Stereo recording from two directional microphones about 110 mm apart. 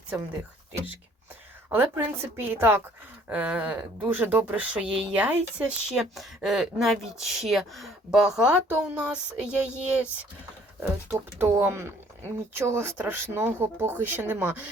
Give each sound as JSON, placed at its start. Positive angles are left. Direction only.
{"t": 1.7, "sound": "speech", "side_deg": -20}
{"t": 10.8, "sound": "speech", "side_deg": -20}